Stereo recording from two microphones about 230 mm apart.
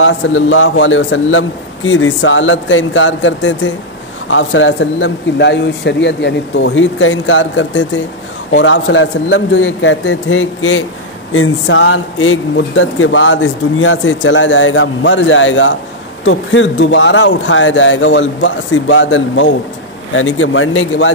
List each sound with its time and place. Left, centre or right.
0.0 s a man's voice: left